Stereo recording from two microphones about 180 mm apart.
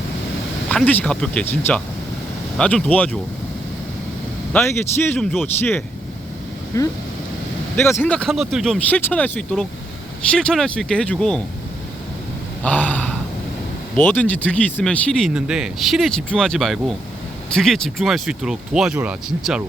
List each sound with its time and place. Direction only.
0.7 s speech: 10° left (ahead or behind)
4.5 s speech: 10° left (ahead or behind)
6.7 s speech: 15° left (ahead or behind)
12.6 s a sound: 10° left (ahead or behind)
13.9 s speech: 10° left (ahead or behind); by 19.6 s 5° right (ahead or behind)